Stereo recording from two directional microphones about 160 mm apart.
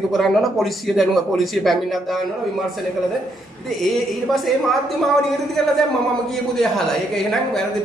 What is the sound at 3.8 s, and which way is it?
Speech, centre (ahead or behind).